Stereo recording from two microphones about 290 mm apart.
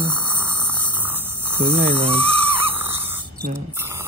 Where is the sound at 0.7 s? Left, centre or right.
Centre.